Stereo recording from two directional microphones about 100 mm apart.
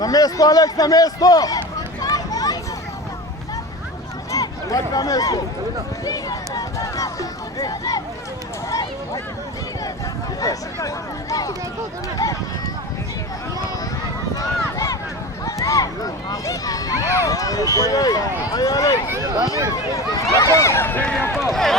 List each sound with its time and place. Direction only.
0.0 s a sound: 40° left (ahead or behind)
4.3 s a sound: 35° left (ahead or behind)
6.1 s speech: 35° left (ahead or behind)
10.4 s speech: 35° left (ahead or behind)
14.3 s run: 35° left (ahead or behind)
15.4 s speech: 35° left (ahead or behind)
20.3 s speech: 30° left (ahead or behind)
21.3 s speech: centre (ahead or behind)